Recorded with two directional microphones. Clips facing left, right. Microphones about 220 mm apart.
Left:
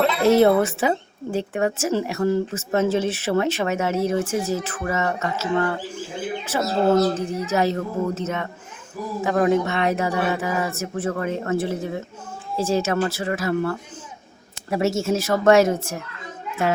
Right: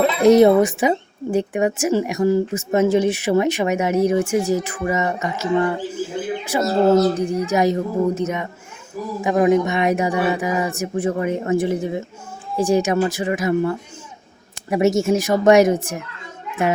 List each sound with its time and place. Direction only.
0.2 s a child's voice: 15° right (ahead or behind)